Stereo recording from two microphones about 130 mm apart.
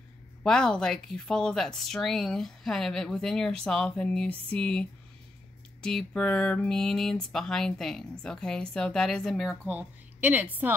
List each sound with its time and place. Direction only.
0.4 s a woman's voice: 5° left (ahead or behind)
9.7 s a woman's voice: 10° right (ahead or behind)